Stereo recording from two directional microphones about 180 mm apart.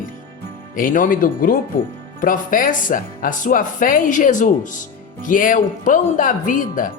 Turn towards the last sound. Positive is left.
turn(degrees=50)  # may be behind; listen again after turning